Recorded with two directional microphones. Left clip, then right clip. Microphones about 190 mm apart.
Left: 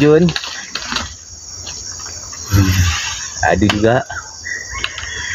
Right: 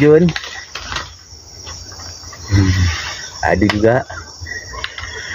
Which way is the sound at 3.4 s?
10° right (ahead or behind).